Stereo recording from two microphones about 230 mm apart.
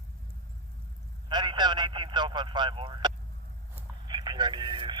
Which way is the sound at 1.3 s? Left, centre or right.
Centre.